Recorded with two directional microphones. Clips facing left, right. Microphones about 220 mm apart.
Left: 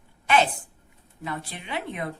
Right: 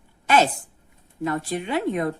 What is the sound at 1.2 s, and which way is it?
Speech, 45° right (ahead or behind).